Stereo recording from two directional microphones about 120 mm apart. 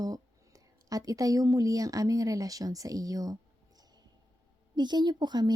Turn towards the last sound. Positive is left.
turn(degrees=-35)  # may be behind; listen again after turning